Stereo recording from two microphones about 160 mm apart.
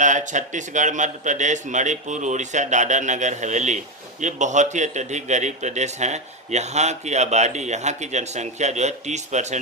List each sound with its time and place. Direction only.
0.0 s a man's voice: 50° right (ahead or behind)